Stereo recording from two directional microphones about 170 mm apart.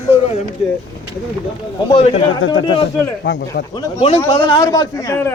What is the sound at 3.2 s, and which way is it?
Speech, 80° left.